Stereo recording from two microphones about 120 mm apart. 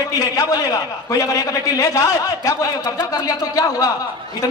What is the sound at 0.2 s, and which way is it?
A man's voice, 30° left (ahead or behind).